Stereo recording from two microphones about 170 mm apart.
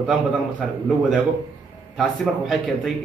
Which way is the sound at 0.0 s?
5° right (ahead or behind).